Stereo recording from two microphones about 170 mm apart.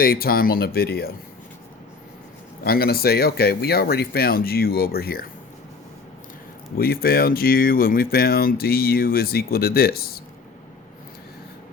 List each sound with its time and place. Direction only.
0.0 s speech: 60° left (ahead or behind)
2.6 s speech: 65° left (ahead or behind)
6.7 s speech: 60° left (ahead or behind)